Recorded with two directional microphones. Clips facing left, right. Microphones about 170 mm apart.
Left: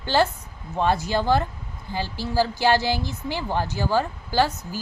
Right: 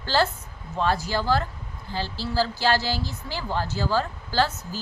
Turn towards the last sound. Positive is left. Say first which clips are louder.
# left 2 dB
turn(degrees=15)  # may be behind; listen again after turning